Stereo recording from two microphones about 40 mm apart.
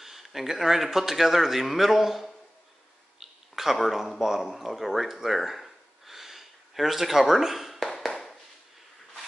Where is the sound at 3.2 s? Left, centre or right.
Centre.